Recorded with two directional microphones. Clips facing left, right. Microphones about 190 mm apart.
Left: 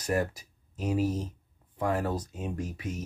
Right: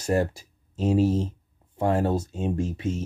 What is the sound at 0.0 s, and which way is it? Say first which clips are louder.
Speech: right 5 dB; 25° right (ahead or behind).